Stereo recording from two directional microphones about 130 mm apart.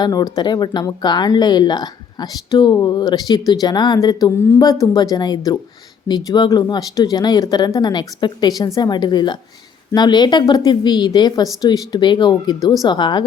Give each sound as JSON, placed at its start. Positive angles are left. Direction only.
{"t": 0.0, "sound": "speech", "side_deg": 30}